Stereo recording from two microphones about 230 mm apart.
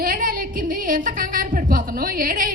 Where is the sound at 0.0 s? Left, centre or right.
Right.